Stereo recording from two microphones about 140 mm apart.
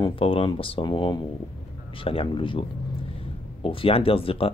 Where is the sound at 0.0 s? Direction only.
40° left (ahead or behind).